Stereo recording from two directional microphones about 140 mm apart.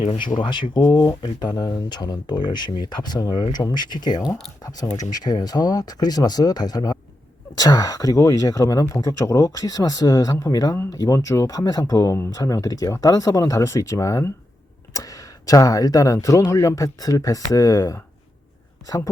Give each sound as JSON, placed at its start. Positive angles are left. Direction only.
{"t": 0.0, "sound": "speech", "side_deg": 40}